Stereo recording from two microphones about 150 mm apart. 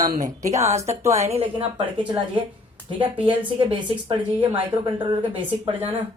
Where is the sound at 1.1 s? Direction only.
45° right (ahead or behind).